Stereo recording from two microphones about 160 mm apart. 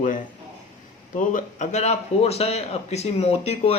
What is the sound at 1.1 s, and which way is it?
A man's voice, 55° left (ahead or behind).